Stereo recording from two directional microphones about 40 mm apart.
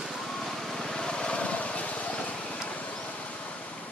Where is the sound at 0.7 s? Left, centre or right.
Centre.